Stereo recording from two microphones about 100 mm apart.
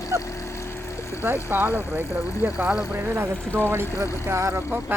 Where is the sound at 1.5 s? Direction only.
20° right (ahead or behind).